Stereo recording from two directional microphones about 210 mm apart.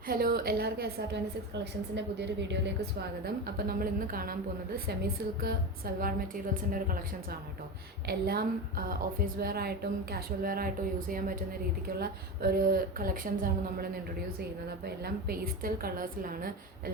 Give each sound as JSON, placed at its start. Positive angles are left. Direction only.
{"t": 0.1, "sound": "a woman's voice", "side_deg": -45}
{"t": 8.0, "sound": "a woman's voice", "side_deg": -50}
{"t": 11.9, "sound": "a woman's voice", "side_deg": -45}